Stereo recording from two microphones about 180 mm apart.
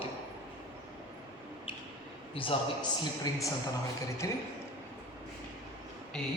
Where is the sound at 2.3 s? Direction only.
30° left (ahead or behind).